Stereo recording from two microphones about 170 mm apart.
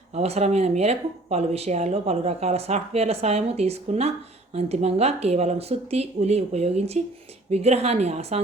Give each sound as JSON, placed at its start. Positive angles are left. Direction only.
{"t": 0.1, "sound": "speech", "side_deg": -40}